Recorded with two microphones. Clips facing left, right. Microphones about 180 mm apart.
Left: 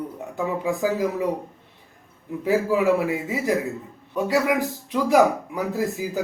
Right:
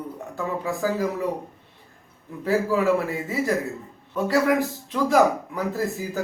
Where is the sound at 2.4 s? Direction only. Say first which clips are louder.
Left 1 dB; 15° left (ahead or behind).